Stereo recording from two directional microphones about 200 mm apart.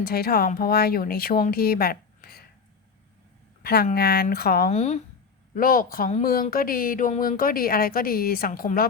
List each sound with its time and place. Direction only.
0.0 s speech: 50° left (ahead or behind)
3.6 s speech: 50° left (ahead or behind)
4.7 s speech: 35° left (ahead or behind)
5.5 s speech: 45° left (ahead or behind)